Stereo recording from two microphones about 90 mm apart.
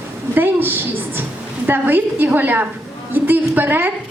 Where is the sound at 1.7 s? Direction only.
20° right (ahead or behind).